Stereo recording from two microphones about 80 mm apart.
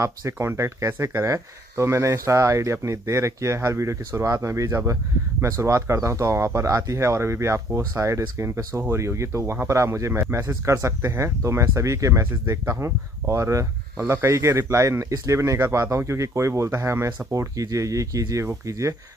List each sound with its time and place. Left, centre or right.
0.0 s speech: right